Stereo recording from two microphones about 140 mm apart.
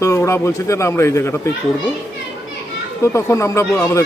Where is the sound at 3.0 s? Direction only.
20° left (ahead or behind).